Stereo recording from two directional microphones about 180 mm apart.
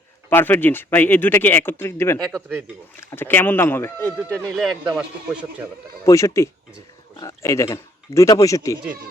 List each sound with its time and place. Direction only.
0.3 s a man's voice: 10° left (ahead or behind); by 5.6 s 5° right (ahead or behind)
6.1 s a man's voice: 15° left (ahead or behind)